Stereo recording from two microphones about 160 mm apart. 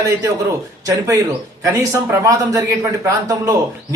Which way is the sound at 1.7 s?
15° right (ahead or behind).